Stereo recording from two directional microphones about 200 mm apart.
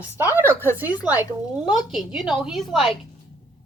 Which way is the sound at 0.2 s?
10° right (ahead or behind).